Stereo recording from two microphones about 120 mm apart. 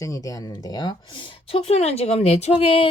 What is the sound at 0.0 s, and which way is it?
Speech, 30° left (ahead or behind).